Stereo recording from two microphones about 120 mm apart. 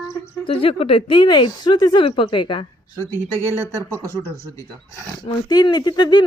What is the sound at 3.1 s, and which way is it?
Speech, 20° right (ahead or behind).